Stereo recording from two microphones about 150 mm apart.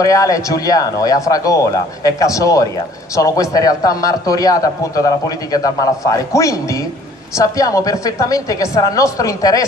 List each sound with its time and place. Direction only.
0.0 s a man's voice: 20° left (ahead or behind)